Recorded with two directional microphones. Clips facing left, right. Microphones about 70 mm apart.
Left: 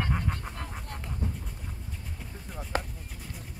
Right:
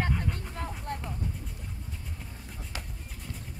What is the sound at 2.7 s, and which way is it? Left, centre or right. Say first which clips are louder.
Chop: left 11 dB; left.